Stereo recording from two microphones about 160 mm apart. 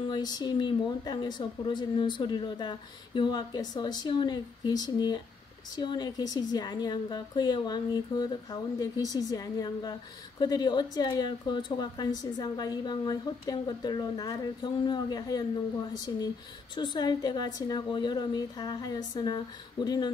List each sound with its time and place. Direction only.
0.1 s a woman's voice: 25° left (ahead or behind)
16.7 s a woman's voice: 30° left (ahead or behind)